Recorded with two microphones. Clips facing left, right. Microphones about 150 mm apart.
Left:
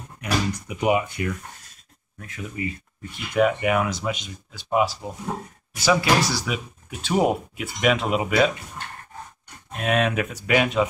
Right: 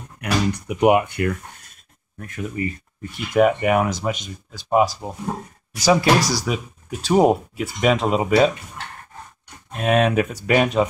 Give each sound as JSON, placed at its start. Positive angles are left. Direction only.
{"t": 0.2, "sound": "speech", "side_deg": -65}
{"t": 2.2, "sound": "speech", "side_deg": -50}
{"t": 9.8, "sound": "speech", "side_deg": -40}